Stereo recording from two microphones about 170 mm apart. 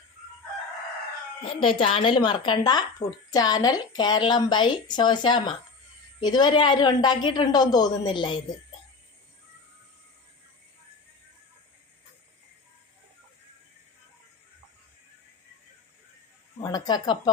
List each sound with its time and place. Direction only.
1.5 s speech: 30° left (ahead or behind)
16.6 s speech: 25° left (ahead or behind)